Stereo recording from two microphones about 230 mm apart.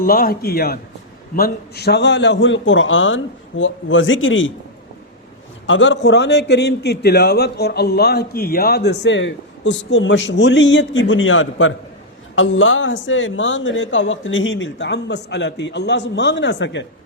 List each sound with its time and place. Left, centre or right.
0.0 s a man's voice: left
5.6 s a man's voice: left